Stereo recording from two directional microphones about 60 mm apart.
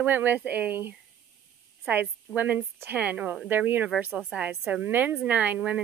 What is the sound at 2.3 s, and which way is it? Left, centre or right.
A woman's voice, right.